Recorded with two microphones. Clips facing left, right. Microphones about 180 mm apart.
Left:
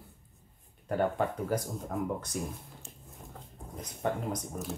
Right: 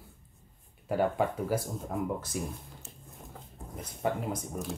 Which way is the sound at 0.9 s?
10° right (ahead or behind).